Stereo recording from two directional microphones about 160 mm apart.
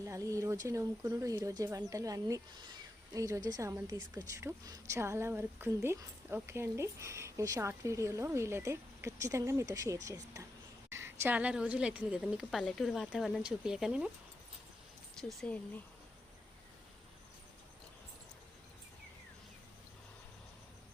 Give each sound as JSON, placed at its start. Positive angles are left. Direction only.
{"t": 0.0, "sound": "a woman's voice", "side_deg": -20}
{"t": 15.2, "sound": "a woman's voice", "side_deg": 0}